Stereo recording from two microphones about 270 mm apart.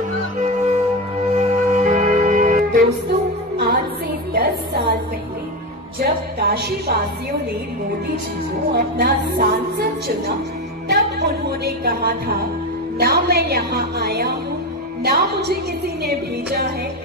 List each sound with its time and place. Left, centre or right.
0.4 s music: right
4.3 s music: right
5.9 s music: right
8.7 s a woman's voice: right